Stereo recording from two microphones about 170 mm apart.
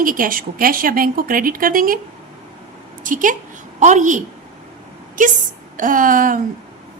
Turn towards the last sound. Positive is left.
turn(degrees=-55)  # may be behind; listen again after turning